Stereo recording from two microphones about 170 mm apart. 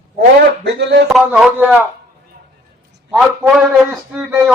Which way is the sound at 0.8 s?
80° right.